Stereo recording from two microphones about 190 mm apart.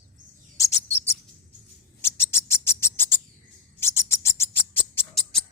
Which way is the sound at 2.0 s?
15° left (ahead or behind).